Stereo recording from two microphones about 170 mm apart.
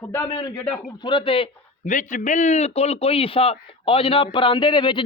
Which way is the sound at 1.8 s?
50° left (ahead or behind).